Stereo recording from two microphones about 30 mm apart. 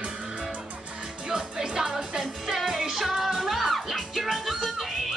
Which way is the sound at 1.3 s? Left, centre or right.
Right.